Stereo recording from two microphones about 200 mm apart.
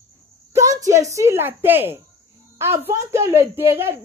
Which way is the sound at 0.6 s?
15° right (ahead or behind).